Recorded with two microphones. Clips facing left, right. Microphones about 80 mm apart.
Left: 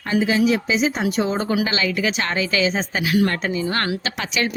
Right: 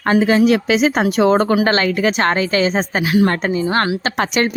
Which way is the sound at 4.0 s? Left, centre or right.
Right.